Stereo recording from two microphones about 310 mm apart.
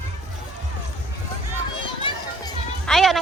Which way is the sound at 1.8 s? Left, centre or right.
Centre.